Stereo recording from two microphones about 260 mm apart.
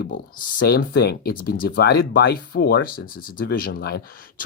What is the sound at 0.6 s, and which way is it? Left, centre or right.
Speech, left.